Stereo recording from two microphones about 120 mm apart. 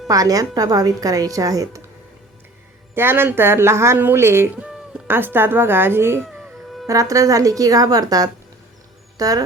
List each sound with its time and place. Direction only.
0.1 s speech: 30° right (ahead or behind)
2.9 s speech: 20° right (ahead or behind)